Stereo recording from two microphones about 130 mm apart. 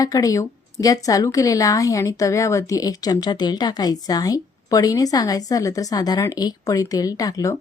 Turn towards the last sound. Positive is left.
turn(degrees=30)  # may be behind; listen again after turning